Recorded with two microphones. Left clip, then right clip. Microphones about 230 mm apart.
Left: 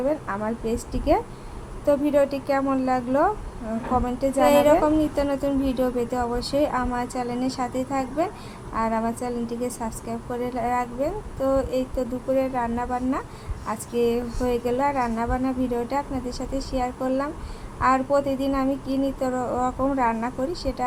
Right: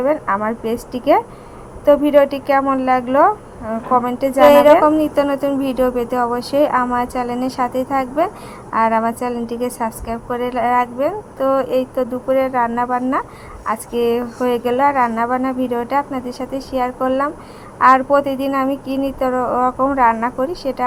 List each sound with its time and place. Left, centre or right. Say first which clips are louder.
0.0 s a woman's voice: right 9 dB; centre